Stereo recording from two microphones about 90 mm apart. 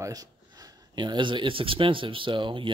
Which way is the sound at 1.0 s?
60° right (ahead or behind).